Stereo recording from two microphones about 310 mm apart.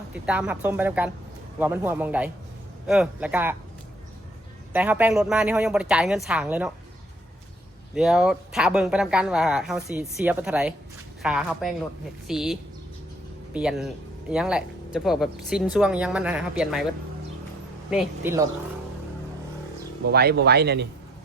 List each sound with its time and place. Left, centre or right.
0.1 s speech: centre
4.7 s speech: centre
7.9 s speech: centre
17.9 s a woman's voice: centre
20.1 s speech: right